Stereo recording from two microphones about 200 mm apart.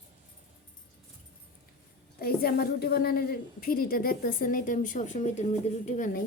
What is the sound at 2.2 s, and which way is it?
A woman's voice, 50° left (ahead or behind).